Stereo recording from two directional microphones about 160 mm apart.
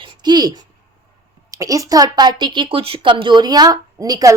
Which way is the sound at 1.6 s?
20° right (ahead or behind).